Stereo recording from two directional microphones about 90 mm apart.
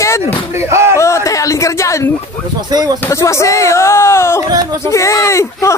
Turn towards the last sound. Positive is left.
turn(degrees=30)  # may be behind; listen again after turning